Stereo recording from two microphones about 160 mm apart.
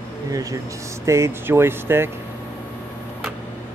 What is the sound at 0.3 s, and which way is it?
A man's voice, 20° right (ahead or behind).